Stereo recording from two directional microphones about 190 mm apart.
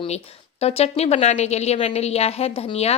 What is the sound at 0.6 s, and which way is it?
A woman's voice, 30° left (ahead or behind).